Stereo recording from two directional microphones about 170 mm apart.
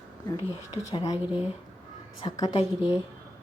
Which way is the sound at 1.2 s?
10° right (ahead or behind).